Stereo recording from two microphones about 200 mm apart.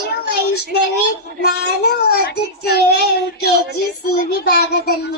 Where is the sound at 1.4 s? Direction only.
50° left (ahead or behind).